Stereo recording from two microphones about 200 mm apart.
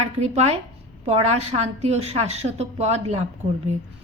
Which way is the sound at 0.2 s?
35° right (ahead or behind).